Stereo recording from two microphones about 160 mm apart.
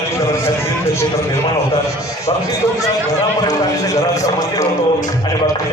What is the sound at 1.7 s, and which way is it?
A man's voice, 20° left (ahead or behind).